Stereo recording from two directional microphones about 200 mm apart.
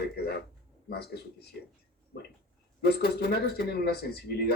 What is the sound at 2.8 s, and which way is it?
Speech, 55° left (ahead or behind).